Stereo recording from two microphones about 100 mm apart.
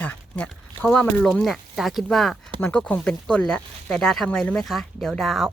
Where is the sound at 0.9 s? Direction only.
5° left (ahead or behind).